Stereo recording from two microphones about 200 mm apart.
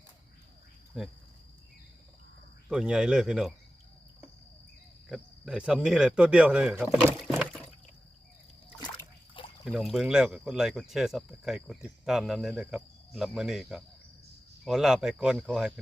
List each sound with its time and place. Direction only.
0.9 s speech: 5° right (ahead or behind)
2.6 s speech: 5° right (ahead or behind)
5.0 s speech: centre (ahead or behind)
8.8 s splash: 25° left (ahead or behind)
9.6 s speech: centre (ahead or behind)